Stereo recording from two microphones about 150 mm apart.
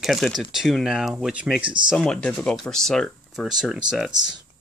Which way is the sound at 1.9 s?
5° left (ahead or behind).